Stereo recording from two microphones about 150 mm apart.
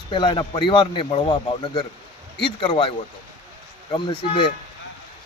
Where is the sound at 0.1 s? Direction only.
30° left (ahead or behind).